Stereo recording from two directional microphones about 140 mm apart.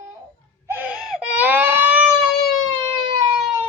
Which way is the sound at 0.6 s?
10° right (ahead or behind).